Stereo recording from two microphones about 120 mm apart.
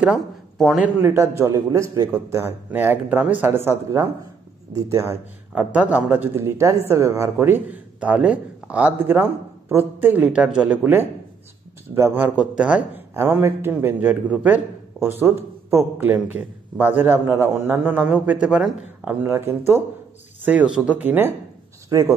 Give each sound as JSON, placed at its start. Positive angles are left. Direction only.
{"t": 0.0, "sound": "speech", "side_deg": 0}
{"t": 0.8, "sound": "a man's voice", "side_deg": -20}
{"t": 2.3, "sound": "a man's voice", "side_deg": -15}
{"t": 13.1, "sound": "a man's voice", "side_deg": -20}
{"t": 19.0, "sound": "a man's voice", "side_deg": -15}